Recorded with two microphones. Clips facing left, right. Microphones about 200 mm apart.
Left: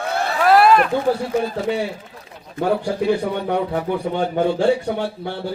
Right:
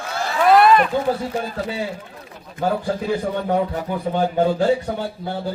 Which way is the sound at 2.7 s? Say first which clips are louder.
Left 3 dB; 70° left (ahead or behind).